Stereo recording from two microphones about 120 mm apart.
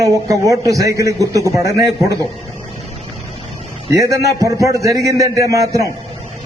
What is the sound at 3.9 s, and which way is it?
A man's voice, 25° right (ahead or behind).